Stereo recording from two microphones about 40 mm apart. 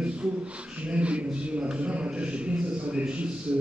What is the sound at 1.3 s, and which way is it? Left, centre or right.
A man's voice, right.